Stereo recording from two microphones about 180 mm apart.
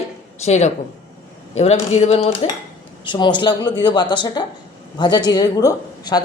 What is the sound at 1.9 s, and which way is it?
Cutlery, 35° left (ahead or behind).